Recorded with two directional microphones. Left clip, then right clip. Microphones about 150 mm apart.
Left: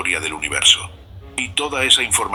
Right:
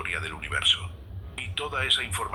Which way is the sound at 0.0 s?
35° left (ahead or behind).